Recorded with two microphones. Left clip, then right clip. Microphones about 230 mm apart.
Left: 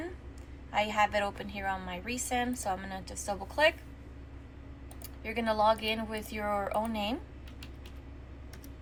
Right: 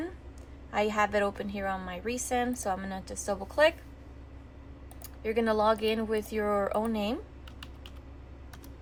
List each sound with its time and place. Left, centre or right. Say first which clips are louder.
0.7 s a woman's voice: right 1 dB; right
5.2 s a woman's voice: right 2 dB; right